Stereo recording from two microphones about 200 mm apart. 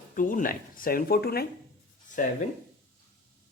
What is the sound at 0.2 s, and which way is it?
Speech, 40° left (ahead or behind).